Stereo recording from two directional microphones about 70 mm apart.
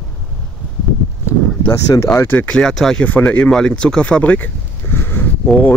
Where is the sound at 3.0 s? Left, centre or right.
Left.